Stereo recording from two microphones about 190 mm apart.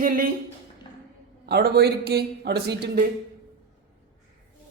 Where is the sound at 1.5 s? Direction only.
55° right (ahead or behind).